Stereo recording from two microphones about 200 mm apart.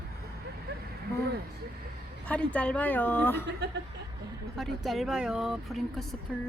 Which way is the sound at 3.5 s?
60° right (ahead or behind).